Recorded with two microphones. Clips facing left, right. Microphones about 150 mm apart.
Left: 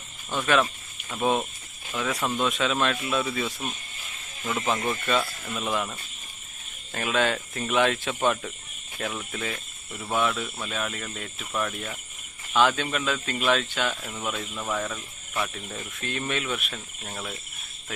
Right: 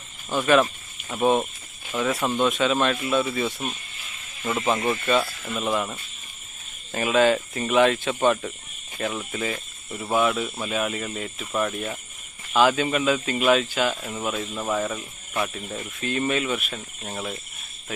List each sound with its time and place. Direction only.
0.3 s speech: centre (ahead or behind)
14.6 s speech: 15° right (ahead or behind)
15.5 s speech: centre (ahead or behind)